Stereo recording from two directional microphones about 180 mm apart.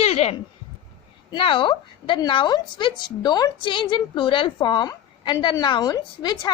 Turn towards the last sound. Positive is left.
turn(degrees=25)  # may be behind; listen again after turning